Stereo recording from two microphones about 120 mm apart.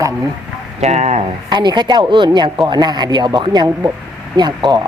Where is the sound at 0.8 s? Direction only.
70° right (ahead or behind).